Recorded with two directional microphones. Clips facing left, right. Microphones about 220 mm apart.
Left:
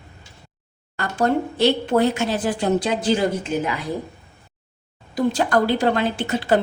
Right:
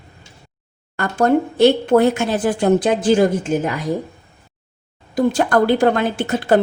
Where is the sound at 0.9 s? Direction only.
50° right (ahead or behind).